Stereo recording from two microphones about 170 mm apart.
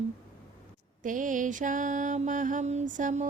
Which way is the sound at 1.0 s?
50° right (ahead or behind).